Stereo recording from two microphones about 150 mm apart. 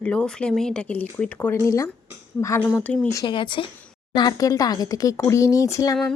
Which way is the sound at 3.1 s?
30° left (ahead or behind).